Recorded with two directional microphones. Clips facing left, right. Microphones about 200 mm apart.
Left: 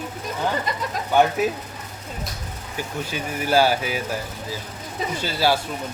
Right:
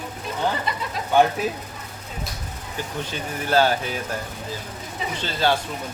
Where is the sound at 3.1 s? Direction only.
10° left (ahead or behind).